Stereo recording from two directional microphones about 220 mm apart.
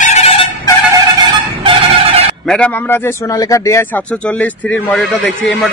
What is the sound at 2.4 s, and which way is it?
A man's voice, 5° left (ahead or behind).